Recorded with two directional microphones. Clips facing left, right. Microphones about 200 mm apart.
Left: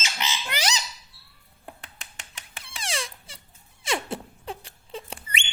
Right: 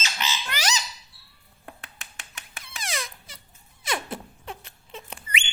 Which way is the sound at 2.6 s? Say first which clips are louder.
Left 1 dB; 30° left (ahead or behind).